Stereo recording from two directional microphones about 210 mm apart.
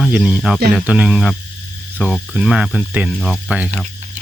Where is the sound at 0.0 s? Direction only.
Centre (ahead or behind).